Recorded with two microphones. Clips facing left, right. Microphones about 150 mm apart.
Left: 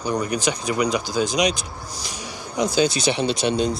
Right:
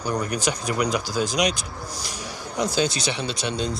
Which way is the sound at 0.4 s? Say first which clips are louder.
Left 2 dB; centre (ahead or behind).